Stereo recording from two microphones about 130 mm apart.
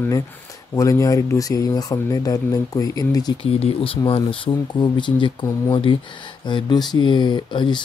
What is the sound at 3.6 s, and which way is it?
Speech, 45° left (ahead or behind).